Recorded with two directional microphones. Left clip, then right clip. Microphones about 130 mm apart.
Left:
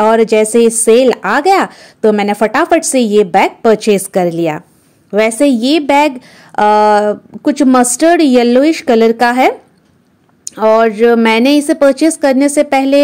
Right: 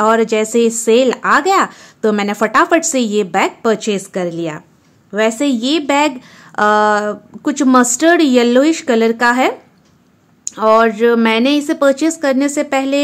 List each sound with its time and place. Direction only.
0.0 s a woman's voice: 25° left (ahead or behind)